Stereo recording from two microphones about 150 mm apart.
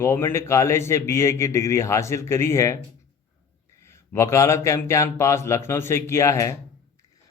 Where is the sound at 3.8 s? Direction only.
20° left (ahead or behind).